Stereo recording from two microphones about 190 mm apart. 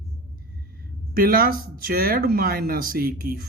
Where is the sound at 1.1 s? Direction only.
50° right (ahead or behind).